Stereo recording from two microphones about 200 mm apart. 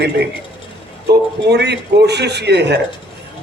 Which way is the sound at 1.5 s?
55° right (ahead or behind).